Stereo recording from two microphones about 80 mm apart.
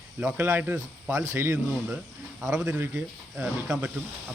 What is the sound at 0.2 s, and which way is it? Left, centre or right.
Speech, right.